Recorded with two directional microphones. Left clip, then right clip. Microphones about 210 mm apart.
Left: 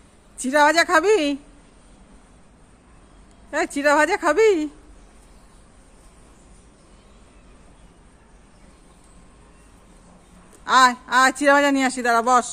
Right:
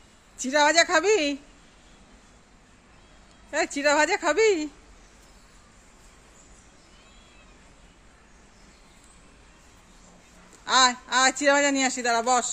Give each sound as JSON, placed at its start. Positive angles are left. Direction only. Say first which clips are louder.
{"t": 0.4, "sound": "speech", "louder": "left 4 dB", "side_deg": 5}
{"t": 3.4, "sound": "speech", "louder": "left 4 dB", "side_deg": 0}
{"t": 10.6, "sound": "a man's voice", "louder": "left 5 dB", "side_deg": 10}